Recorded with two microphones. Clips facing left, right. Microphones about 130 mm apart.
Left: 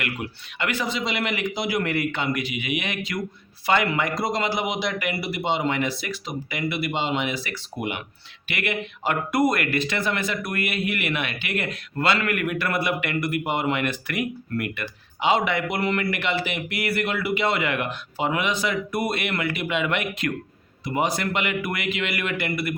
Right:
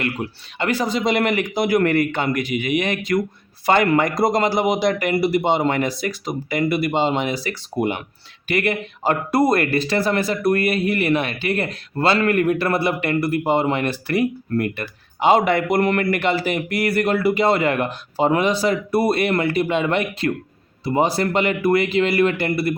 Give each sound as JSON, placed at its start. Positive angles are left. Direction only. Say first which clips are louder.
{"t": 0.0, "sound": "speech", "louder": "right 5 dB", "side_deg": -35}